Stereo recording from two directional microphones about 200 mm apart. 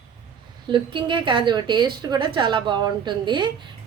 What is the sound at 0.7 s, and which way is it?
A woman's voice, 25° right (ahead or behind).